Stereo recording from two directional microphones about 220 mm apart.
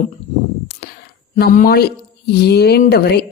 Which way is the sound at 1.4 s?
45° left (ahead or behind).